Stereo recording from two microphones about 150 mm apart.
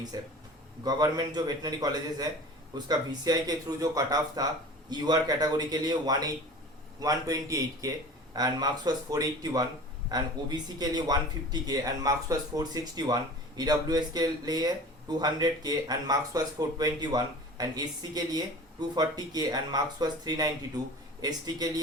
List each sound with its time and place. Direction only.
0.1 s speech: 25° right (ahead or behind)